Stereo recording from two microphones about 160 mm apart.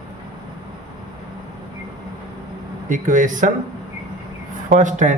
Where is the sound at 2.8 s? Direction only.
55° right (ahead or behind).